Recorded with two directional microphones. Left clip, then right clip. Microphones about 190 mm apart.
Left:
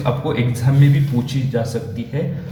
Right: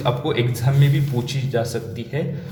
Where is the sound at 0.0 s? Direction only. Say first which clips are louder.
Even; 35° right (ahead or behind).